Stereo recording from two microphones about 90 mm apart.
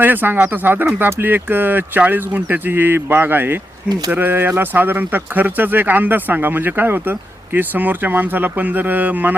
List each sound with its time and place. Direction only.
0.0 s speech: 20° right (ahead or behind)